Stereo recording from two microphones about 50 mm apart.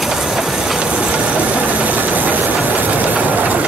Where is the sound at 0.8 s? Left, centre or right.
Right.